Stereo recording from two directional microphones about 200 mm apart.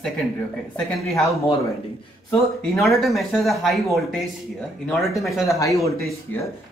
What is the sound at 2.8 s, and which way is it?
Speech, centre (ahead or behind).